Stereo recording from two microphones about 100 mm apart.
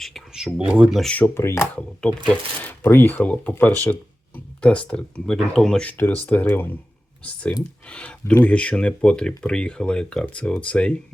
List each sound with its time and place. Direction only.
0.0 s a sound: centre (ahead or behind)
1.2 s speech: 25° left (ahead or behind)
1.7 s speech: 10° left (ahead or behind)